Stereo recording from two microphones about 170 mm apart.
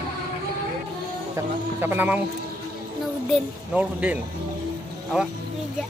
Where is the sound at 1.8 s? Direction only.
10° right (ahead or behind).